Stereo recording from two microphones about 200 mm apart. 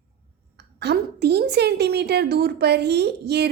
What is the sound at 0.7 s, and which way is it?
A woman's voice, 55° right (ahead or behind).